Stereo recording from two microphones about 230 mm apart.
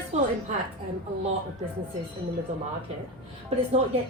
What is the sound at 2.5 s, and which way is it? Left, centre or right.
Speech, right.